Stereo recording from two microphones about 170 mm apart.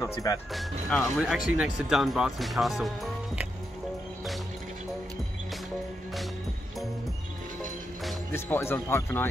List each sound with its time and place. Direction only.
0.0 s speech: 20° left (ahead or behind)
0.5 s speech: centre (ahead or behind)
8.3 s speech: 15° left (ahead or behind)